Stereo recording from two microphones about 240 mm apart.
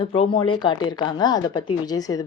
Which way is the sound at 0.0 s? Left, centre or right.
Left.